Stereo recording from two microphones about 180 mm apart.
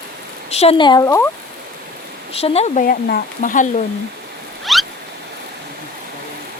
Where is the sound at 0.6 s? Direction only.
30° left (ahead or behind).